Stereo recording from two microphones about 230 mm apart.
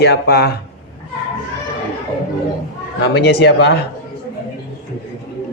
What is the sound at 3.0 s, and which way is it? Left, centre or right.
Speech, left.